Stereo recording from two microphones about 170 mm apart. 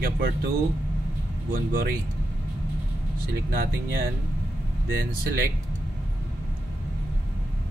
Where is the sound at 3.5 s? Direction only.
60° right (ahead or behind).